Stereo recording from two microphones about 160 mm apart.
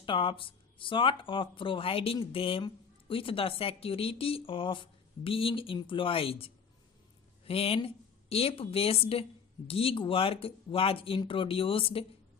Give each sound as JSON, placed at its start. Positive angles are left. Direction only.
{"t": 0.0, "sound": "speech", "side_deg": 30}